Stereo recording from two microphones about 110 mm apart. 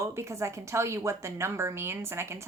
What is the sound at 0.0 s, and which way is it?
A woman's voice, 25° right (ahead or behind).